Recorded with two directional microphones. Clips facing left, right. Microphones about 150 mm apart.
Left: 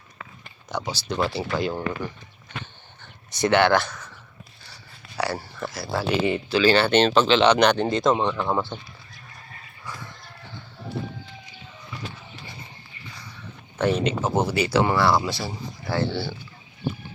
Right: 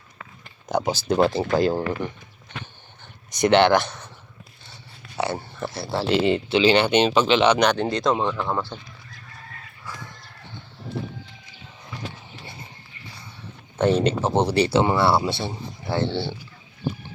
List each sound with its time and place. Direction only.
0.7 s speech: 50° right (ahead or behind); by 8.4 s centre (ahead or behind)
13.8 s speech: 30° right (ahead or behind)